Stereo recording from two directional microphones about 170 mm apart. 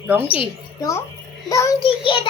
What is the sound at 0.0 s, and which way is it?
Speech, 10° right (ahead or behind).